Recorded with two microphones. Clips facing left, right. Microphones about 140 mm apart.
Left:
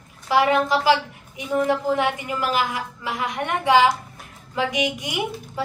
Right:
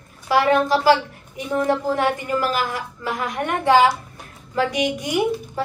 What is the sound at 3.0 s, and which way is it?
Speech, 45° right (ahead or behind).